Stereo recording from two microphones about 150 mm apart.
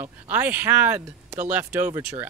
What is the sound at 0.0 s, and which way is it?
Speech, 15° right (ahead or behind).